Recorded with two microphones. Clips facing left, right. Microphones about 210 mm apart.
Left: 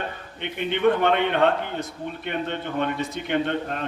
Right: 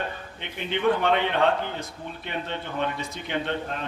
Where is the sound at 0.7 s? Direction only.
55° left (ahead or behind).